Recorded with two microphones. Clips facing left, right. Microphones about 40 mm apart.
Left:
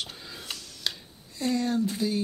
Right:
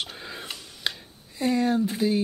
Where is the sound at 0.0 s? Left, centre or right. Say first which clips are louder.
Right 4 dB; right.